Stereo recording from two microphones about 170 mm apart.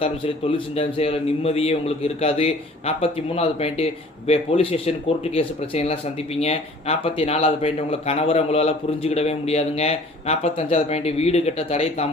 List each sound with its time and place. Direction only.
0.0 s speech: 35° left (ahead or behind)